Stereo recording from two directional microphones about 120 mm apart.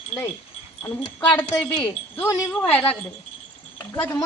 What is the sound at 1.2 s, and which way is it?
A woman's voice, 15° left (ahead or behind).